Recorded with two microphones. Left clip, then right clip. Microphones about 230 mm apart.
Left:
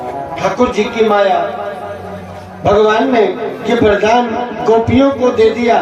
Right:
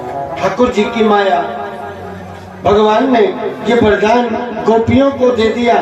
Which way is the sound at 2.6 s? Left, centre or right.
Left.